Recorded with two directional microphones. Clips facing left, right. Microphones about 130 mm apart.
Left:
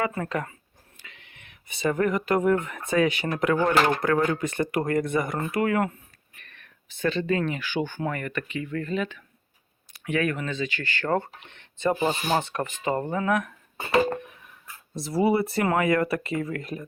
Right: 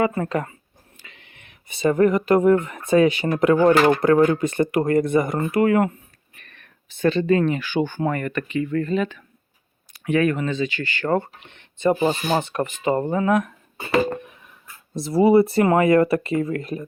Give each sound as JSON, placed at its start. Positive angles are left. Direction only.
{"t": 0.0, "sound": "speech", "side_deg": -30}
{"t": 6.4, "sound": "speech", "side_deg": -40}
{"t": 12.8, "sound": "speech", "side_deg": -25}
{"t": 14.9, "sound": "speech", "side_deg": -25}